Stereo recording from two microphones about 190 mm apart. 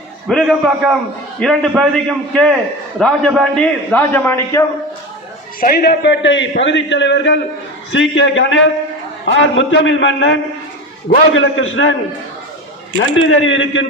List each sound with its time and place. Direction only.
0.3 s a man's voice: centre (ahead or behind)
5.5 s a man's voice: 50° left (ahead or behind); by 10.3 s 75° left (ahead or behind)
11.3 s a man's voice: 90° left
13.1 s a man's voice: 90° left